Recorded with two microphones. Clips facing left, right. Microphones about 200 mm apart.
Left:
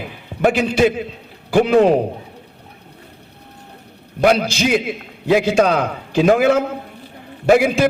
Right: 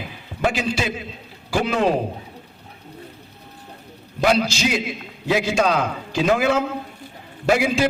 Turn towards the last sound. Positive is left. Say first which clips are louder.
# left 5 dB
turn(degrees=55)  # may be behind; listen again after turning